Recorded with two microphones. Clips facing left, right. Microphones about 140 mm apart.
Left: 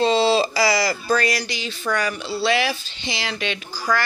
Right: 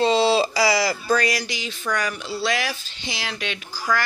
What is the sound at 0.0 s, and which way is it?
Speech, 10° right (ahead or behind).